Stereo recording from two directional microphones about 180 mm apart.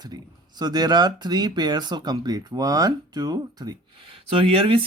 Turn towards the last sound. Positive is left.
turn(degrees=-30)  # may be behind; listen again after turning